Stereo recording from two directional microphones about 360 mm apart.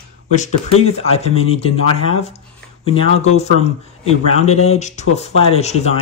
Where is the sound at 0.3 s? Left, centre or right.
Centre.